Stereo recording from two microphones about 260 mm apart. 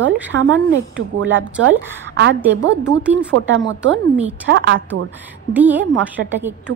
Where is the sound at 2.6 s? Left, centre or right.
Right.